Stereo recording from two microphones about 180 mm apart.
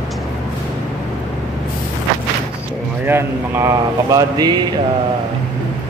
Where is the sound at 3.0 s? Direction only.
10° right (ahead or behind).